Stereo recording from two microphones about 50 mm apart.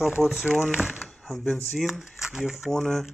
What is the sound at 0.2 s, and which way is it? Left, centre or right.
Speech, centre.